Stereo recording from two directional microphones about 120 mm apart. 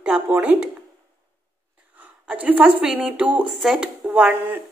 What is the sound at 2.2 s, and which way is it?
A woman's voice, 10° right (ahead or behind).